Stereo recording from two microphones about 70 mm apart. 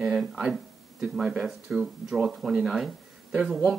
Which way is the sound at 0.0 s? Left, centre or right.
Centre.